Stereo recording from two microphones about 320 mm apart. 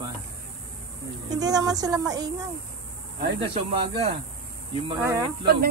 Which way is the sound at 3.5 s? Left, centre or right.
Centre.